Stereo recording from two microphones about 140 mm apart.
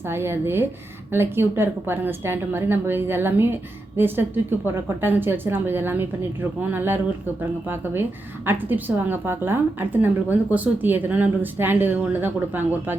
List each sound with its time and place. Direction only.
0.0 s a woman's voice: 15° right (ahead or behind)
8.4 s a woman's voice: 15° right (ahead or behind)